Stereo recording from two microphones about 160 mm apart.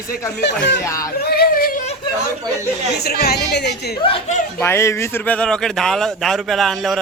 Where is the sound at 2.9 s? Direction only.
85° left.